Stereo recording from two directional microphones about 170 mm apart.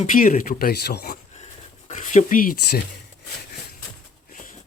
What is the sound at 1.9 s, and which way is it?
Speech, 45° left (ahead or behind).